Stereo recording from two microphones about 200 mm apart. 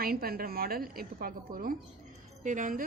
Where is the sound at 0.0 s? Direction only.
50° right (ahead or behind).